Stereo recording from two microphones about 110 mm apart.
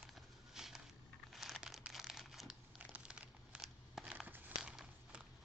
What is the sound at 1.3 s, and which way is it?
Crumpling, centre (ahead or behind).